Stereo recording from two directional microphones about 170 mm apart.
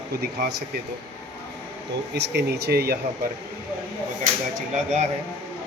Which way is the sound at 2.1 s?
75° right (ahead or behind).